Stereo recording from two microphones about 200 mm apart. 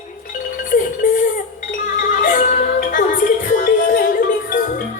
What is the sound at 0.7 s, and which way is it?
Music, 40° left (ahead or behind).